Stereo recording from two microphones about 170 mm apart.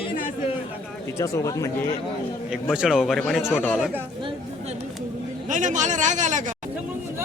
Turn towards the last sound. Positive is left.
turn(degrees=-45)  # may be behind; listen again after turning